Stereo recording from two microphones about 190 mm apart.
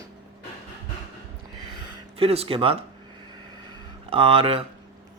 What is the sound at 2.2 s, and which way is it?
Speech, 30° right (ahead or behind).